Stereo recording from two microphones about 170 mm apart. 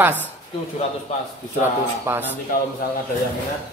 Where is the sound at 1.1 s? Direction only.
40° left (ahead or behind).